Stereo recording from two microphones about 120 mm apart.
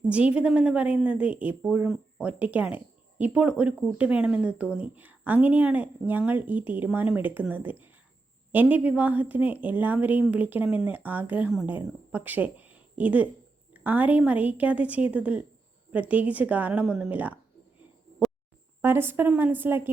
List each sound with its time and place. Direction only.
0.1 s speech: 10° right (ahead or behind)
18.8 s speech: 20° right (ahead or behind)